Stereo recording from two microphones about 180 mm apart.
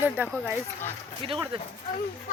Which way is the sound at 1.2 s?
30° right (ahead or behind).